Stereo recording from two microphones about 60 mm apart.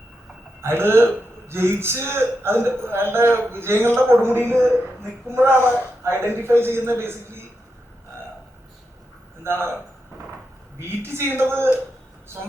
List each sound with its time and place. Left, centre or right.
0.6 s a man's voice: right
9.4 s a man's voice: right
10.8 s a man's voice: right